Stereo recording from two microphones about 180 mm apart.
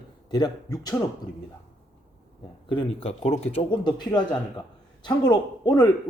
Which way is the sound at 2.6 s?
30° left (ahead or behind).